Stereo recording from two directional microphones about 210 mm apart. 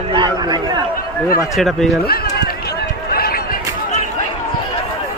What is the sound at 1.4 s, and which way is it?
Speech, centre (ahead or behind).